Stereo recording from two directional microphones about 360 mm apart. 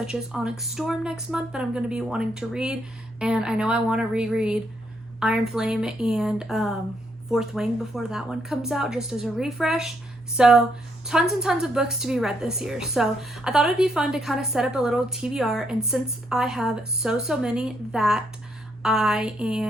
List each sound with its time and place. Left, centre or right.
0.0 s a woman's voice: centre